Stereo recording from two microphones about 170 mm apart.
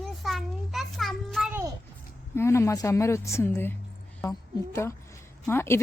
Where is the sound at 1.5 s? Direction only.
15° right (ahead or behind).